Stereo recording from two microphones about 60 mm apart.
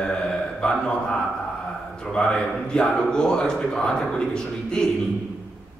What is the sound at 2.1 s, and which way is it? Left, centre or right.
Speech, centre.